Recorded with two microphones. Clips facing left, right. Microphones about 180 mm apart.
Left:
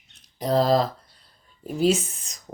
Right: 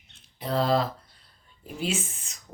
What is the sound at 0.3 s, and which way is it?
Speech, 40° left (ahead or behind).